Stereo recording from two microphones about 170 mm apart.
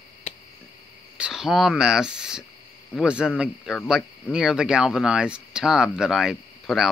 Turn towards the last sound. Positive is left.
turn(degrees=0)  # may be behind; listen again after turning